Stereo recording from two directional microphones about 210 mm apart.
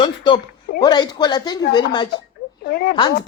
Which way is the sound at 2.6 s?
50° left (ahead or behind).